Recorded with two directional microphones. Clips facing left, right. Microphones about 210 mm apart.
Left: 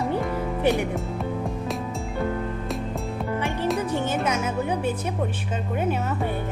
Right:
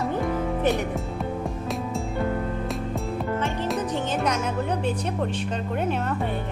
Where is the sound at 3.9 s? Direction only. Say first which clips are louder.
Left 1 dB; 5° left (ahead or behind).